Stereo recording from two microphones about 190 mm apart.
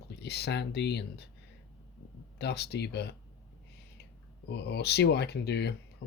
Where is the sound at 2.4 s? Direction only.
60° left (ahead or behind).